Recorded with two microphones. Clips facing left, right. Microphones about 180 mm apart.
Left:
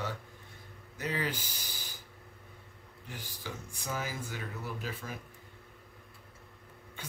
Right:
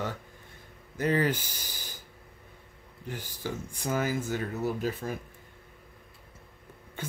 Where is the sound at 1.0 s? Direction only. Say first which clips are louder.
Right 9 dB; 50° right (ahead or behind).